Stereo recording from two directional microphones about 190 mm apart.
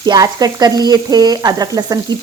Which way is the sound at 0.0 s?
20° right (ahead or behind).